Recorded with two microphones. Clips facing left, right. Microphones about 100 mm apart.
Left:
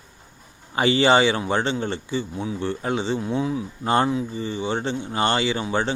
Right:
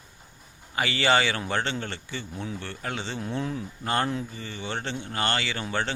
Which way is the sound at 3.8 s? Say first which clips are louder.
Left 6 dB; 20° left (ahead or behind).